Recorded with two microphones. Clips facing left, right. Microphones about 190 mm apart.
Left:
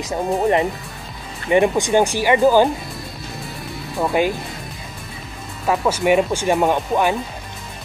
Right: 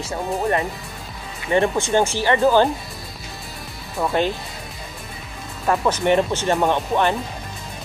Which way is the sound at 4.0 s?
15° left (ahead or behind).